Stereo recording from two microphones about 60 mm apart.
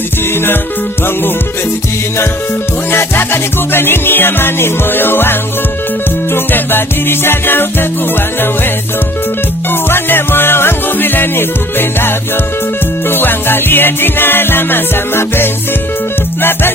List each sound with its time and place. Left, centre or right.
2.9 s music: left
9.9 s music: left